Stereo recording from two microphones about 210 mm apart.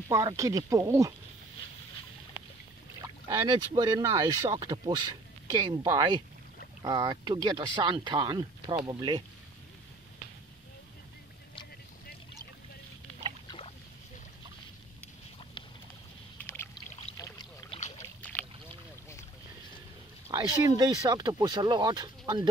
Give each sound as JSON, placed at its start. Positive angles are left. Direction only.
{"t": 0.1, "sound": "speech", "side_deg": -15}
{"t": 3.0, "sound": "speech", "side_deg": -20}
{"t": 16.3, "sound": "rowboat", "side_deg": 10}
{"t": 17.2, "sound": "boat", "side_deg": 20}
{"t": 17.9, "sound": "boat", "side_deg": 5}
{"t": 20.2, "sound": "speech", "side_deg": -20}